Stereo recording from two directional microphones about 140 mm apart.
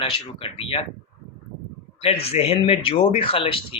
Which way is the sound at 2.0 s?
45° left (ahead or behind).